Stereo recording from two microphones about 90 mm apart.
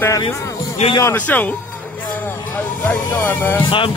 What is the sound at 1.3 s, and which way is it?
Speech, 20° left (ahead or behind).